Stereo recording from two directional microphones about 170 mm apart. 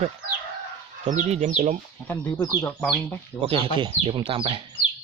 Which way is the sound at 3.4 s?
35° right (ahead or behind).